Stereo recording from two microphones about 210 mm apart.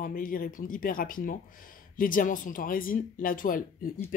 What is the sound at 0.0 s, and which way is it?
Speech, 40° left (ahead or behind).